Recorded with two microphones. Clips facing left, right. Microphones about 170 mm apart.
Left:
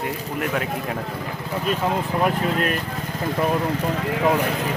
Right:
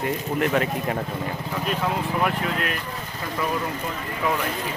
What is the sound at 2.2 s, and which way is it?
Speech, 40° left (ahead or behind).